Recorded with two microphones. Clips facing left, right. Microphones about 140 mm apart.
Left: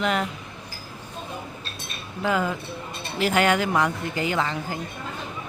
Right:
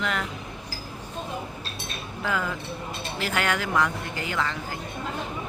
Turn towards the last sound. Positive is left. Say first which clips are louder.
# left 4 dB
turn(degrees=20)  # may be behind; listen again after turning